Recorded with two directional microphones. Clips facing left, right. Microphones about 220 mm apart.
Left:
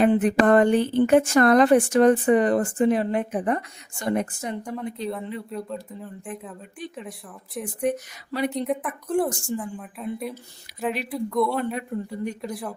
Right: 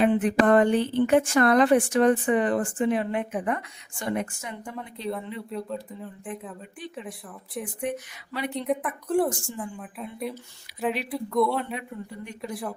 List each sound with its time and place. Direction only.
0.0 s a woman's voice: 40° left (ahead or behind)
5.0 s a woman's voice: centre (ahead or behind)
7.9 s a woman's voice: 40° left (ahead or behind)
8.6 s a woman's voice: centre (ahead or behind)
11.7 s a man's voice: 40° left (ahead or behind)
12.4 s a woman's voice: centre (ahead or behind)